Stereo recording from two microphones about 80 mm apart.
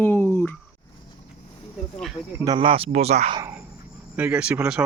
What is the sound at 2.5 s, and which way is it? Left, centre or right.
Speech, right.